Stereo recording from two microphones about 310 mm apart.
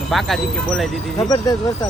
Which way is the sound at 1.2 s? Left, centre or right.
Centre.